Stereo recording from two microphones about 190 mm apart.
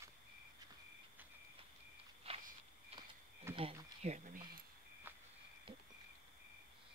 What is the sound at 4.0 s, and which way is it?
Speech, 40° right (ahead or behind).